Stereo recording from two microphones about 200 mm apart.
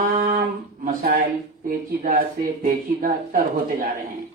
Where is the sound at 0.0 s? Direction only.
45° right (ahead or behind).